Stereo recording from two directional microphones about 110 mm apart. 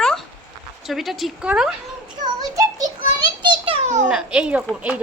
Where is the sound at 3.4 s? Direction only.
50° right (ahead or behind).